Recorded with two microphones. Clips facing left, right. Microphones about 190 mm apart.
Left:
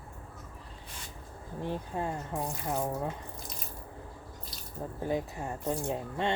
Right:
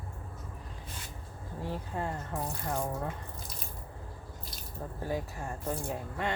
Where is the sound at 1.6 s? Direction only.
15° left (ahead or behind).